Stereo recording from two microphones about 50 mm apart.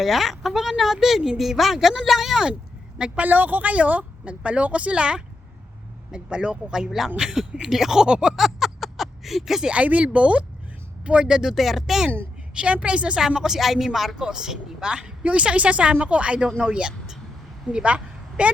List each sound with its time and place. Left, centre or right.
0.0 s a woman's voice: centre
3.2 s a woman's voice: right; by 8.4 s centre
8.4 s a sound: centre
9.6 s a woman's voice: right; by 12.1 s centre
12.5 s a woman's voice: right
13.1 s a woman's voice: centre
14.2 s a woman's voice: centre